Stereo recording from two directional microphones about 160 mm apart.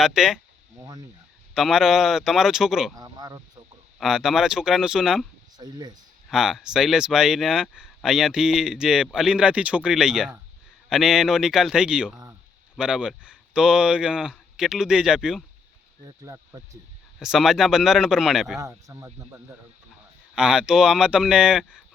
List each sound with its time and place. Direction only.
0.0 s speech: 5° right (ahead or behind)
0.8 s a sound: 25° right (ahead or behind)
1.5 s speech: 5° right (ahead or behind)
2.9 s a sound: 25° right (ahead or behind)
4.0 s speech: 5° right (ahead or behind)
5.5 s speech: 25° right (ahead or behind)
6.3 s speech: 5° right (ahead or behind)
16.2 s speech: 20° right (ahead or behind)
17.2 s speech: 5° right (ahead or behind)
18.6 s speech: 20° right (ahead or behind)
20.3 s speech: 5° right (ahead or behind)